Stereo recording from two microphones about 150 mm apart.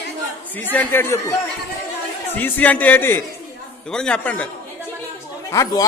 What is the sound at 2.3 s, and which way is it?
A man's voice, 10° left (ahead or behind).